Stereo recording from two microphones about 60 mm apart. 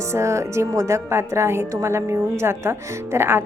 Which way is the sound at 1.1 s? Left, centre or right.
Right.